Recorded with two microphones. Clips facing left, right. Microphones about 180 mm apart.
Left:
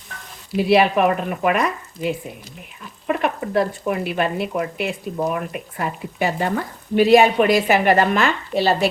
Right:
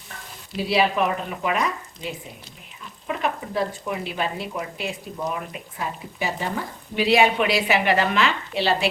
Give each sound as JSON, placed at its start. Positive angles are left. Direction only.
{"t": 0.5, "sound": "speech", "side_deg": 60}
{"t": 6.9, "sound": "a woman's voice", "side_deg": 45}